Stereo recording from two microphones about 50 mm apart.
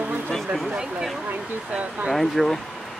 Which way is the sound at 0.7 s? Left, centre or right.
Centre.